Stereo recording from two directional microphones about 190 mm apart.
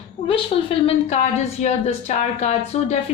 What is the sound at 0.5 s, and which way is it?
A woman's voice, 35° left (ahead or behind).